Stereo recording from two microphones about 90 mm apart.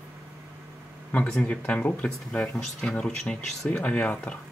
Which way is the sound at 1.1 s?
15° left (ahead or behind).